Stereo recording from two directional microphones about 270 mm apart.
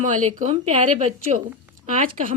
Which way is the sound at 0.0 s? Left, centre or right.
Right.